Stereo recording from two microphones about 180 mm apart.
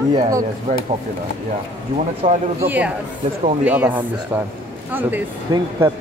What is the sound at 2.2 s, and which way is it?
Speech, 35° right (ahead or behind).